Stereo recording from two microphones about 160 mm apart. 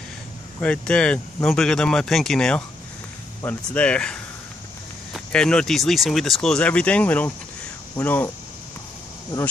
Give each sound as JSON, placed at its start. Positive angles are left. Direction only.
{"t": 0.6, "sound": "speech", "side_deg": 5}